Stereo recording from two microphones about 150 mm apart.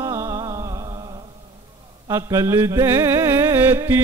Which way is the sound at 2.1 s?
20° right (ahead or behind).